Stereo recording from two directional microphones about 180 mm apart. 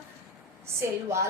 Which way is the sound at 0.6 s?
15° right (ahead or behind).